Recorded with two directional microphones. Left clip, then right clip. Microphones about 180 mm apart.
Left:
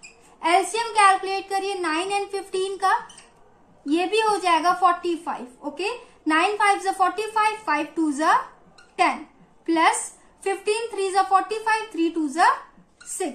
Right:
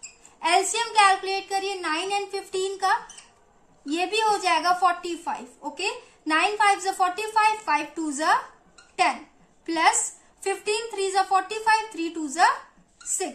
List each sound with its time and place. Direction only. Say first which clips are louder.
0.4 s a woman's voice: left 2 dB; 20° right (ahead or behind)
9.7 s a woman's voice: left 2 dB; 15° right (ahead or behind)